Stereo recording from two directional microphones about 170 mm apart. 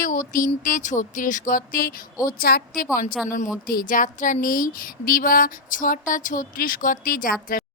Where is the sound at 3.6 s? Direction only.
55° left (ahead or behind).